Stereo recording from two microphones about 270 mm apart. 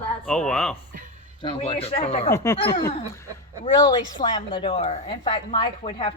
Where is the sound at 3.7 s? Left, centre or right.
Centre.